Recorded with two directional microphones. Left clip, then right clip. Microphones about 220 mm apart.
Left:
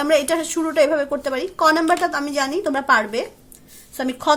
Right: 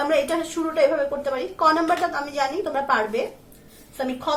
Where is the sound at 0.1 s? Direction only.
50° left (ahead or behind).